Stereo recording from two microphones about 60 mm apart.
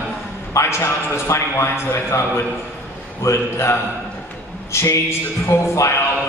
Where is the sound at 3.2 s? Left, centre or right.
Left.